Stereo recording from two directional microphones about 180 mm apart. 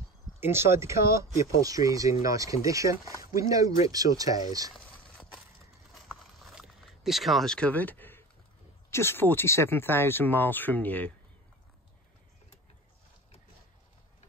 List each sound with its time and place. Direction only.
0.4 s speech: 15° right (ahead or behind)
6.0 s a sound: centre (ahead or behind)
8.9 s speech: 15° left (ahead or behind)